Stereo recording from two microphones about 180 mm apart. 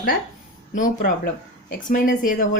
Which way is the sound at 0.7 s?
50° left (ahead or behind).